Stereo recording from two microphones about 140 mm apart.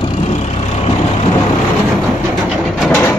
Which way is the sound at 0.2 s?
50° left (ahead or behind).